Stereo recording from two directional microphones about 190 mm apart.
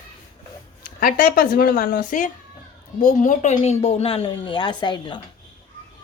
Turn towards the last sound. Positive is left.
turn(degrees=25)  # may be behind; listen again after turning